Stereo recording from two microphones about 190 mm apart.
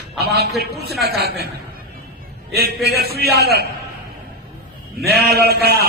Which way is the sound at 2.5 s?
55° right (ahead or behind).